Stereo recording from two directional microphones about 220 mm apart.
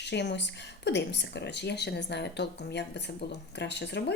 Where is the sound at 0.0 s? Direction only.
50° left (ahead or behind).